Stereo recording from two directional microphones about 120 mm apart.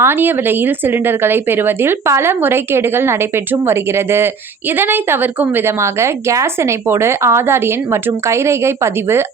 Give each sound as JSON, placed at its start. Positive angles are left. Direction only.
{"t": 0.0, "sound": "a woman's voice", "side_deg": -20}